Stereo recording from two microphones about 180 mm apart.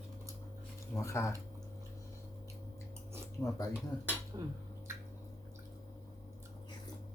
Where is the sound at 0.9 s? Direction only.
15° left (ahead or behind).